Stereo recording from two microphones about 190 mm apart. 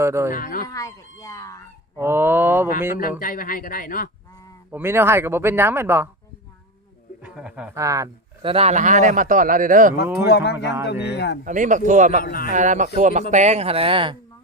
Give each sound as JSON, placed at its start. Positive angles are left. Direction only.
{"t": 0.0, "sound": "speech", "side_deg": -15}
{"t": 0.3, "sound": "speech", "side_deg": 45}
{"t": 0.7, "sound": "speech", "side_deg": 15}
{"t": 2.0, "sound": "speech", "side_deg": -10}
{"t": 2.9, "sound": "speech", "side_deg": 45}
{"t": 4.7, "sound": "speech", "side_deg": -10}
{"t": 7.2, "sound": "a man's voice", "side_deg": -5}
{"t": 10.2, "sound": "speech", "side_deg": 60}
{"t": 11.4, "sound": "a man's voice", "side_deg": -40}
{"t": 12.2, "sound": "speech", "side_deg": 50}
{"t": 12.5, "sound": "a man's voice", "side_deg": -40}